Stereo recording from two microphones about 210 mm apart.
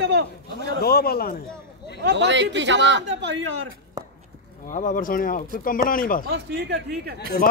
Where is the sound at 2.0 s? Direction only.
55° right (ahead or behind).